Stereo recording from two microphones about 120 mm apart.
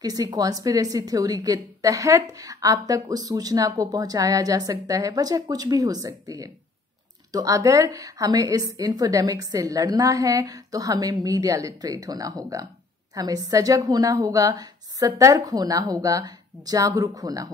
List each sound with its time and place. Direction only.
0.0 s a woman's voice: 30° right (ahead or behind)